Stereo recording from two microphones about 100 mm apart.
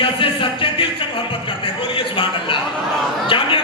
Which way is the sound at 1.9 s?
60° left (ahead or behind).